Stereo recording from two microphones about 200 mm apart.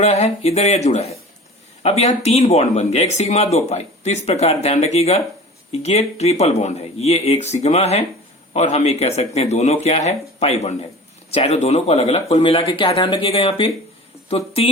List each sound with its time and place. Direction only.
0.0 s speech: 30° left (ahead or behind)